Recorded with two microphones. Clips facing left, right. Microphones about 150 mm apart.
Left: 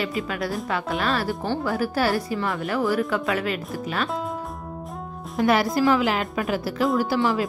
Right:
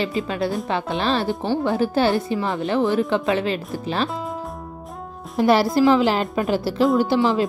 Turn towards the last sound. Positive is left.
turn(degrees=-25)  # may be behind; listen again after turning